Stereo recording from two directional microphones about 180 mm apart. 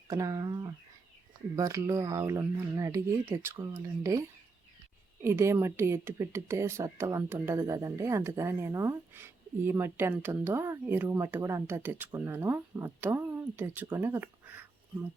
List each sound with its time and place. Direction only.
0.1 s speech: 20° right (ahead or behind)
5.2 s speech: 15° right (ahead or behind)